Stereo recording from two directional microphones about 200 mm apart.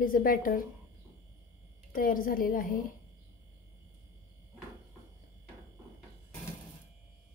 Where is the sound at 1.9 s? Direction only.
45° left (ahead or behind).